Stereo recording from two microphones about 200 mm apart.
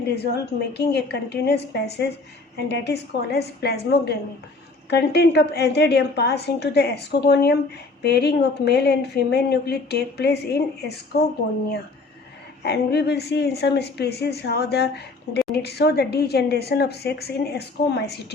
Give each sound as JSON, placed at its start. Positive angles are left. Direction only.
{"t": 0.7, "sound": "speech", "side_deg": 55}
{"t": 12.6, "sound": "a woman's voice", "side_deg": 55}